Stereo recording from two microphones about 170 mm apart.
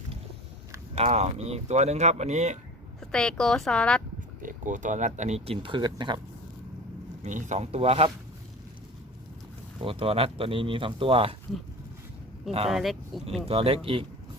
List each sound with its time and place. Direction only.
0.9 s speech: 40° right (ahead or behind)
3.0 s speech: 5° left (ahead or behind)
4.4 s speech: 50° right (ahead or behind); by 6.1 s 25° right (ahead or behind)
7.2 s speech: 45° right (ahead or behind)
9.8 s speech: 35° right (ahead or behind)
12.6 s speech: centre (ahead or behind)
13.5 s speech: 35° right (ahead or behind)